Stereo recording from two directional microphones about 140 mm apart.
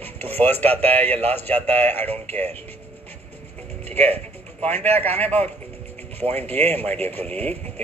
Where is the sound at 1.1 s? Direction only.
50° right (ahead or behind).